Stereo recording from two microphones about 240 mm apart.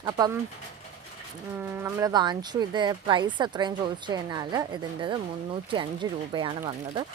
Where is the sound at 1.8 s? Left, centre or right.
Centre.